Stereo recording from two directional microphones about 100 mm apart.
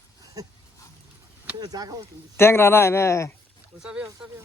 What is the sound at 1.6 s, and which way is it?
Speech, 40° right (ahead or behind).